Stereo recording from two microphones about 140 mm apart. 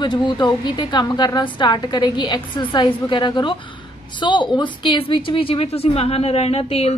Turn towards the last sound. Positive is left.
turn(degrees=45)  # may be behind; listen again after turning